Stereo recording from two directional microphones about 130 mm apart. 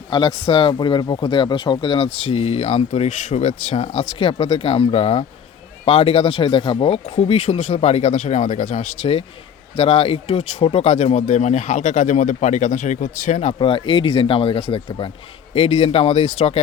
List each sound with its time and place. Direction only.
0.1 s speech: 40° left (ahead or behind); by 9.0 s 70° left (ahead or behind)
9.7 s speech: 50° left (ahead or behind)
13.6 s speech: 40° left (ahead or behind); by 16.6 s 55° left (ahead or behind)